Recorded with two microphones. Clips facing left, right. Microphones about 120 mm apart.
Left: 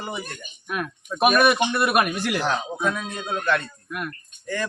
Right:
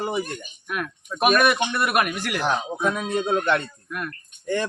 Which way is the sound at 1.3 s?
15° left (ahead or behind).